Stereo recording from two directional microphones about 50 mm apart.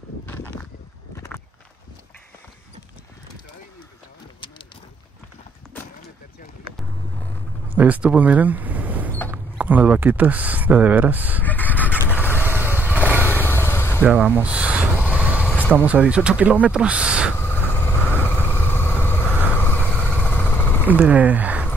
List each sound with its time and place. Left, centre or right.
1.1 s a sound: left
7.7 s speech: right
11.4 s vehicle: left
12.1 s vehicle: left
12.4 s vehicle: right
13.2 s vehicle: left
14.0 s vehicle: right
15.7 s speech: right
17.4 s vehicle: left
19.9 s vehicle: left
20.9 s speech: right